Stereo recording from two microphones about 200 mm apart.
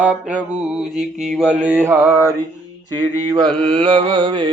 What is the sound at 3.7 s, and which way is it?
Mantra, 25° right (ahead or behind).